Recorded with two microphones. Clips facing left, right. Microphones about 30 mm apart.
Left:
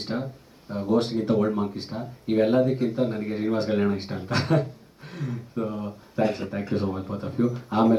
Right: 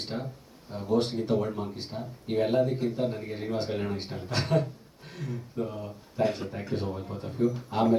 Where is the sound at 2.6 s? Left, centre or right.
Centre.